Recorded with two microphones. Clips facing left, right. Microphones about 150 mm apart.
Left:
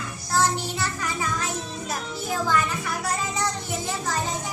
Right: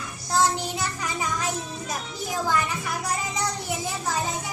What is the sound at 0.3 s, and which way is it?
Music, 15° right (ahead or behind).